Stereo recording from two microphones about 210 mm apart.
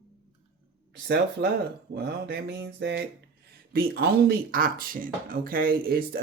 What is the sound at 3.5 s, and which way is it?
Speech, 45° right (ahead or behind).